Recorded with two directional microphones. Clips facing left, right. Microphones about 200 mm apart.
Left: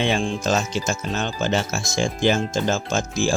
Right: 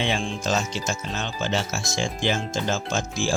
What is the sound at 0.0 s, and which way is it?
Speech, 50° left (ahead or behind).